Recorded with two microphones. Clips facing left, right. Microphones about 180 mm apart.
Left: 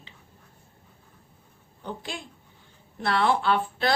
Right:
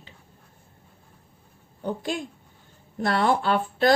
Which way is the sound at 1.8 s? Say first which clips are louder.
Right 7 dB; 45° right (ahead or behind).